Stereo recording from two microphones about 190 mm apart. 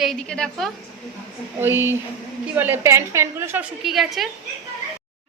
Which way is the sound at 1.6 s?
15° right (ahead or behind).